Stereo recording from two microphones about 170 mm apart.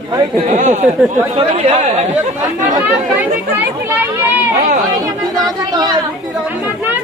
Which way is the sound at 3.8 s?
10° right (ahead or behind).